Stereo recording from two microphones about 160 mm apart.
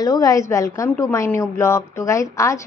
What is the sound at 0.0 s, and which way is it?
A woman's voice, 20° left (ahead or behind).